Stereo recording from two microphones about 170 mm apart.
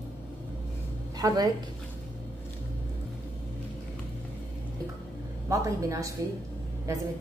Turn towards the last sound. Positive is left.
turn(degrees=-15)  # may be behind; listen again after turning